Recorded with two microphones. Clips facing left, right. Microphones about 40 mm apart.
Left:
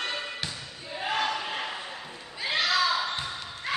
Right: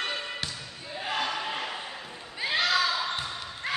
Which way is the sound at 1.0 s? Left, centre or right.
Centre.